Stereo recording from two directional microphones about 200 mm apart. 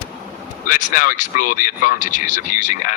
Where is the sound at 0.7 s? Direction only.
40° left (ahead or behind).